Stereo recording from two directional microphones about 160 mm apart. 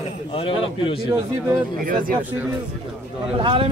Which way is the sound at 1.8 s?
60° right (ahead or behind).